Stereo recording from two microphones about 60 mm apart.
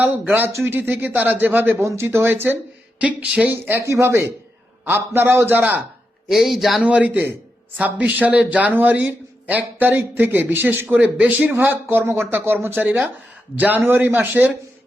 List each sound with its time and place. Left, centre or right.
0.0 s a man's voice: right
1.8 s speech: right
3.0 s a man's voice: centre
3.5 s a man's voice: right
6.2 s speech: centre
6.8 s a man's voice: right
12.7 s a man's voice: right